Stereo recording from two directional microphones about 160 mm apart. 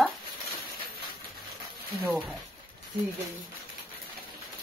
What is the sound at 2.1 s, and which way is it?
Speech, 5° right (ahead or behind).